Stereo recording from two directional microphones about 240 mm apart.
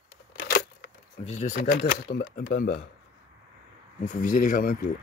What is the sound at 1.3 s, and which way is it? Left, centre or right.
Speech, left.